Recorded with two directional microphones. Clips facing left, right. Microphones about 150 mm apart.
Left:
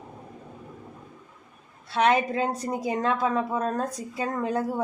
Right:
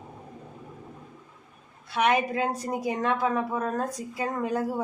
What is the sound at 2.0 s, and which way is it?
A woman's voice, 25° left (ahead or behind).